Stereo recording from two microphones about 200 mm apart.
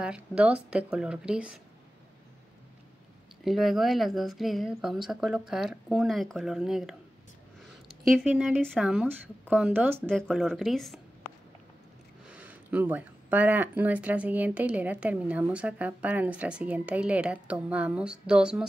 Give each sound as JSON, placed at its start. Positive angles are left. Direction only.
{"t": 0.0, "sound": "a woman's voice", "side_deg": -5}
{"t": 3.4, "sound": "a woman's voice", "side_deg": 0}
{"t": 8.1, "sound": "a woman's voice", "side_deg": 0}
{"t": 10.0, "sound": "a woman's voice", "side_deg": 0}
{"t": 12.3, "sound": "speech", "side_deg": -10}